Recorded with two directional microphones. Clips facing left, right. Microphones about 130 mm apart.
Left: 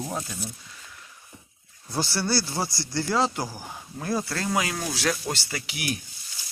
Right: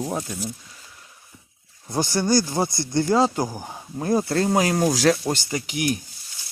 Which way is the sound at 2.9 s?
20° right (ahead or behind).